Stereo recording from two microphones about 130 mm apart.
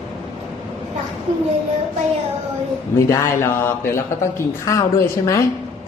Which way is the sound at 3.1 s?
20° left (ahead or behind).